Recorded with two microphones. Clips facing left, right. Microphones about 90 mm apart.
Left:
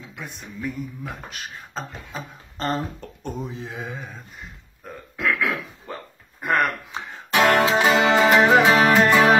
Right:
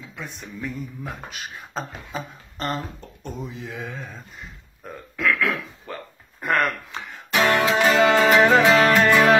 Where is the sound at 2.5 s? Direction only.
35° left (ahead or behind).